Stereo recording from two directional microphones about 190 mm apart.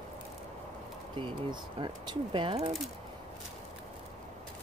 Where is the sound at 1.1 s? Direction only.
25° right (ahead or behind).